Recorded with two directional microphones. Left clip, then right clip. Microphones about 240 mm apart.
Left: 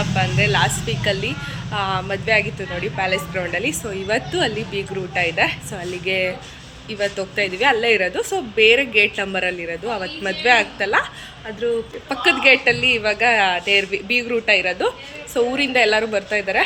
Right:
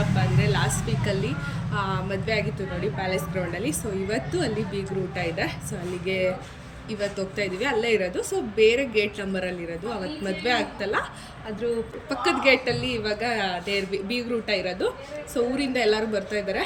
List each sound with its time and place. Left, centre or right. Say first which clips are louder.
0.2 s speech: left 11 dB; centre
7.3 s speech: left 9 dB; centre